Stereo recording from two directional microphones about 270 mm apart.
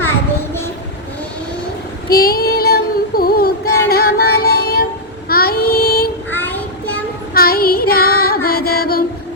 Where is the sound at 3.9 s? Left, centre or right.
Left.